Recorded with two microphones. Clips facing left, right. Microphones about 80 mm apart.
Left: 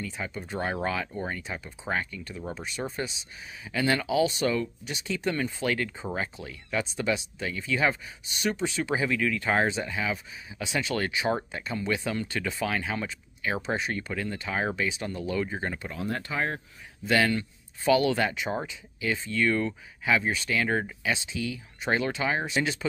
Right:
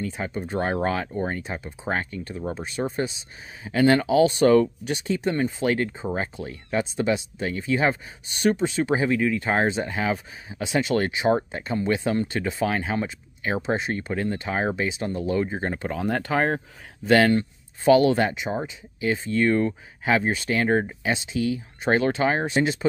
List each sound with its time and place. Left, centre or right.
0.0 s speech: right
5.0 s speech: right
15.9 s speech: right